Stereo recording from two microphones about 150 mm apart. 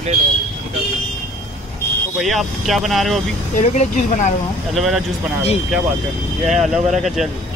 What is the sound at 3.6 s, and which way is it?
Speech, 55° left (ahead or behind).